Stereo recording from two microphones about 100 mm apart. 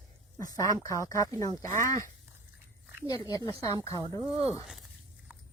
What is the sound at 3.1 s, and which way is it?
Speech, 40° left (ahead or behind).